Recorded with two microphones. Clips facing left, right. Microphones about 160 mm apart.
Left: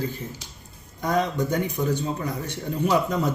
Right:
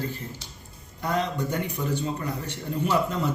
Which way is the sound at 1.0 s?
15° left (ahead or behind).